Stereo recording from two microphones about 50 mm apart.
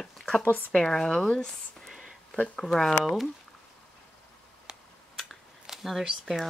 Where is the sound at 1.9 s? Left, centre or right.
Centre.